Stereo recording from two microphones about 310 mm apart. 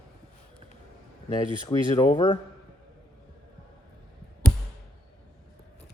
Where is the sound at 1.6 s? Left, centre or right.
Centre.